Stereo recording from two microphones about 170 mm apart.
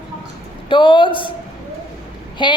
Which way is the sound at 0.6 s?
30° left (ahead or behind).